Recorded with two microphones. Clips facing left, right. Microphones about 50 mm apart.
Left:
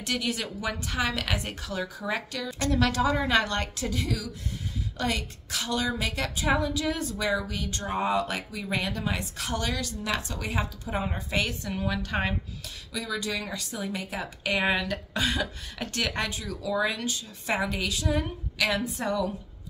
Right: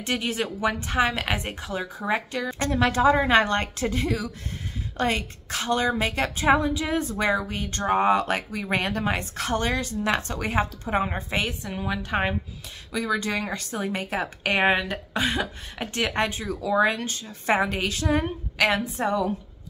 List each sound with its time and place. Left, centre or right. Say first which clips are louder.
0.0 s speech: right 3 dB; right
7.8 s speech: right 7 dB; right
11.4 s a woman's voice: right 1 dB; centre
12.9 s speech: right 6 dB; right